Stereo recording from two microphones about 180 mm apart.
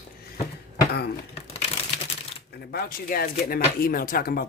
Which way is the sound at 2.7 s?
55° left (ahead or behind).